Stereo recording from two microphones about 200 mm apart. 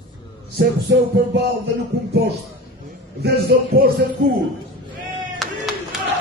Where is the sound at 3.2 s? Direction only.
55° right (ahead or behind).